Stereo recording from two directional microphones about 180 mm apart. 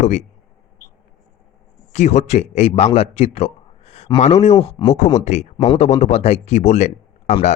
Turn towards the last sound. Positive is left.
turn(degrees=40)  # may be behind; listen again after turning